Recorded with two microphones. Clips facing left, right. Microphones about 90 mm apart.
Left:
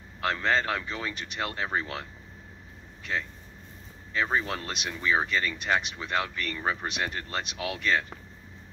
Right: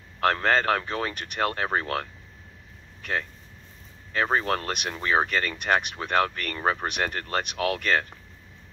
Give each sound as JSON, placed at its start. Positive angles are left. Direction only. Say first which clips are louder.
{"t": 0.2, "sound": "speech", "louder": "right 4 dB", "side_deg": -50}
{"t": 3.0, "sound": "vehicle", "louder": "right 3 dB", "side_deg": -50}
{"t": 4.1, "sound": "speech", "louder": "right 4 dB", "side_deg": -50}